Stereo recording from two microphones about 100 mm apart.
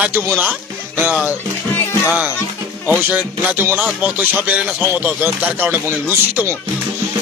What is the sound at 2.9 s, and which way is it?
A man's voice, 15° right (ahead or behind).